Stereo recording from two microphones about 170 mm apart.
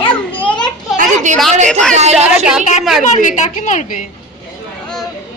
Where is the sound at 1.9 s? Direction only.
40° right (ahead or behind).